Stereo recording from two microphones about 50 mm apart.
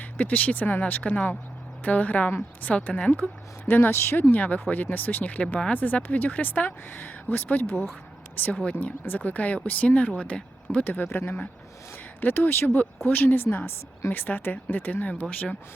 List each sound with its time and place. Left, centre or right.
0.0 s speech: left
3.7 s speech: left
10.8 s speech: left
12.2 s speech: left